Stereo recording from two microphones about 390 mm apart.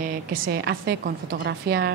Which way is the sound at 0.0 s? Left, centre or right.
Right.